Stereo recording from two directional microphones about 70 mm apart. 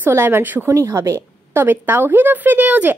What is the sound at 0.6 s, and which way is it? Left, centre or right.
Speech, right.